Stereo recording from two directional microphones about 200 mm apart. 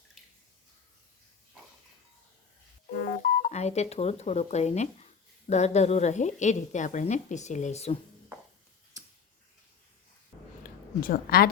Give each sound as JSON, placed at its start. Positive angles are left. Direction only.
{"t": 3.0, "sound": "music", "side_deg": 55}
{"t": 3.5, "sound": "a woman's voice", "side_deg": 35}
{"t": 10.6, "sound": "a woman's voice", "side_deg": 45}